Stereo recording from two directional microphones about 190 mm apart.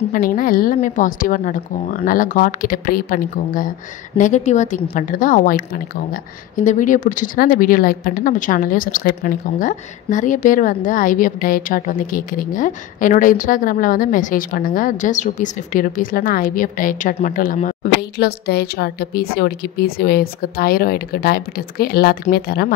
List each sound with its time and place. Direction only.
0.1 s a woman's voice: 45° left (ahead or behind)
18.1 s a woman's voice: 60° left (ahead or behind)